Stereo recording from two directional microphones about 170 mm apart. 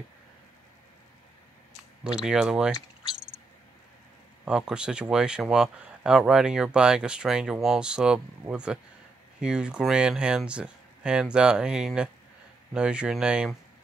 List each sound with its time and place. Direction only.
2.1 s speech: 5° right (ahead or behind)
4.5 s speech: 5° right (ahead or behind)